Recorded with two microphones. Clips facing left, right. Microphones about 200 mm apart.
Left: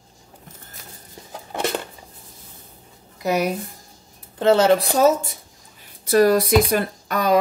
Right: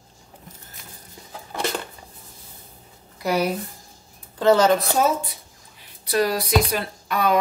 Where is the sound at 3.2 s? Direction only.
20° left (ahead or behind).